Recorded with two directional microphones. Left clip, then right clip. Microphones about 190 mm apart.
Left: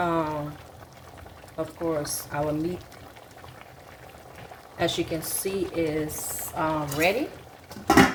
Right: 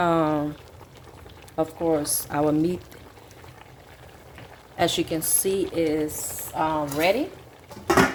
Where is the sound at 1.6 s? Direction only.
60° right (ahead or behind).